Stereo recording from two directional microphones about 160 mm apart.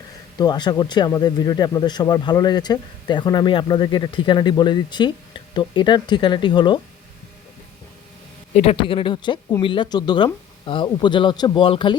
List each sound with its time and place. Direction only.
0.3 s speech: 25° left (ahead or behind)
8.5 s speech: 35° left (ahead or behind)